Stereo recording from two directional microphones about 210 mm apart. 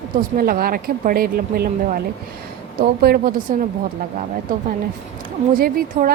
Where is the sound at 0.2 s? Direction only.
45° right (ahead or behind).